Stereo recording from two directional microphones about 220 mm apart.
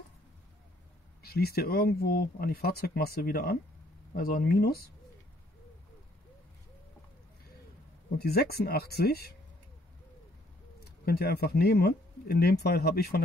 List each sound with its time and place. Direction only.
1.2 s speech: 45° left (ahead or behind)
8.2 s speech: 45° left (ahead or behind)
11.1 s speech: 45° left (ahead or behind)